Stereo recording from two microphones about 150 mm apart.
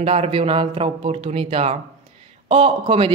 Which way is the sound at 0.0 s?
40° right (ahead or behind).